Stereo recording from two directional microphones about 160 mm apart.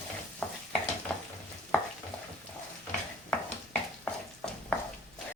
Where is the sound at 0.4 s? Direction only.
10° left (ahead or behind).